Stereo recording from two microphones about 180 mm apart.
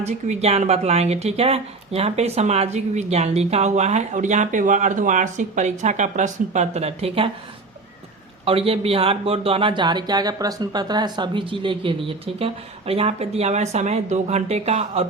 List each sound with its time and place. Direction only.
0.0 s speech: 35° right (ahead or behind)
8.4 s speech: 30° right (ahead or behind)